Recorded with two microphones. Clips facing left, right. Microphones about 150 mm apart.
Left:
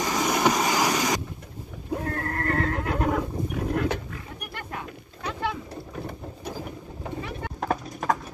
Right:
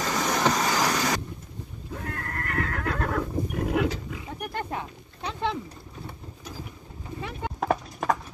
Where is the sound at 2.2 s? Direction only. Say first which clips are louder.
Left 3 dB; 35° left (ahead or behind); by 3.2 s 20° left (ahead or behind).